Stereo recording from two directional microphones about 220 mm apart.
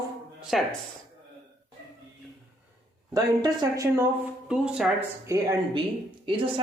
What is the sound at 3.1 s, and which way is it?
Speech, 15° right (ahead or behind).